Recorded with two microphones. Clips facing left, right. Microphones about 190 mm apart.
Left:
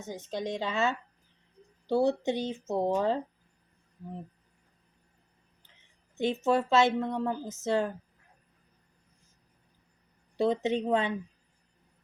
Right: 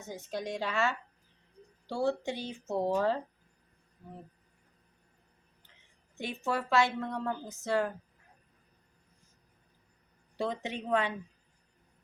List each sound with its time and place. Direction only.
0.0 s a woman's voice: 20° left (ahead or behind)
6.1 s a woman's voice: 20° left (ahead or behind)
10.3 s a woman's voice: 20° left (ahead or behind)